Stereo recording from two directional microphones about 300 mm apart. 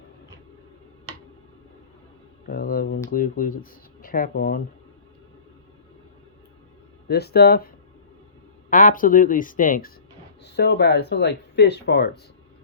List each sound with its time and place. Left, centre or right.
2.5 s speech: left
7.1 s speech: left
8.7 s speech: left